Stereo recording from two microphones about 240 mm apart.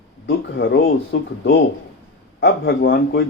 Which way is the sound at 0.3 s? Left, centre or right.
Left.